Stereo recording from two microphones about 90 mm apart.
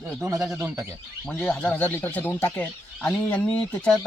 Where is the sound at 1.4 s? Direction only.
15° left (ahead or behind).